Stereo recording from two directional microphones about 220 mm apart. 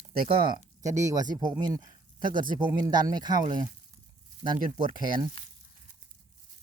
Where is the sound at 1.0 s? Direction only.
15° right (ahead or behind).